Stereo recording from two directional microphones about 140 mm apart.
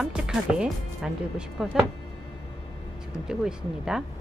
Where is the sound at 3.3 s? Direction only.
5° right (ahead or behind).